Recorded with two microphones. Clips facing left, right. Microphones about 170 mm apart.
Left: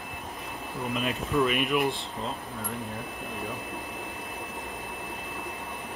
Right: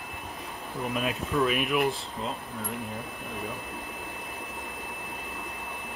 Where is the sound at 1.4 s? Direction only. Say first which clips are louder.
Right 1 dB; centre (ahead or behind).